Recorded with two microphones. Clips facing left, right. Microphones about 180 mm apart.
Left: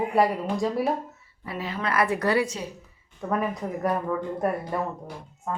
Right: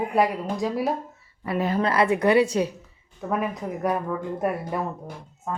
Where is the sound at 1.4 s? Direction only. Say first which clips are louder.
Right 8 dB; 55° right (ahead or behind).